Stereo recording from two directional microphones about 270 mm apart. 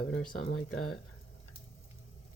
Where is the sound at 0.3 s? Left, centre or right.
Left.